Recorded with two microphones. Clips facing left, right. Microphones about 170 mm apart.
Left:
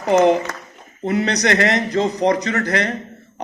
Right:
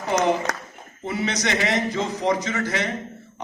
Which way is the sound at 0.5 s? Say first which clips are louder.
Right 2 dB; 75° right (ahead or behind).